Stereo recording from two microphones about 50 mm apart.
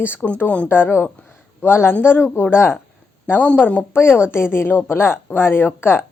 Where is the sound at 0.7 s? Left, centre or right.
Left.